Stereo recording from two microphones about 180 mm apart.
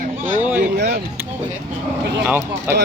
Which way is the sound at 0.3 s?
10° right (ahead or behind).